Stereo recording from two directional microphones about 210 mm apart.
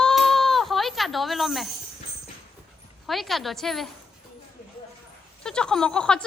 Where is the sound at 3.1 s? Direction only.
Centre (ahead or behind).